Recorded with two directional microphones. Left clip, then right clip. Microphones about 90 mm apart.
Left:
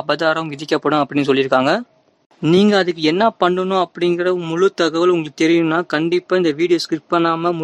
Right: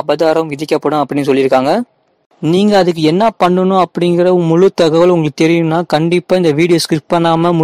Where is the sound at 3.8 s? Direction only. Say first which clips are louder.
Right 6 dB; 50° right (ahead or behind).